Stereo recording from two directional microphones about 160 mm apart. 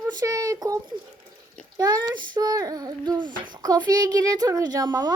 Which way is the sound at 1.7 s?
25° right (ahead or behind).